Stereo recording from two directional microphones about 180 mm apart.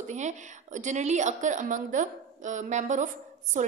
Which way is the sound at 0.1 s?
40° right (ahead or behind).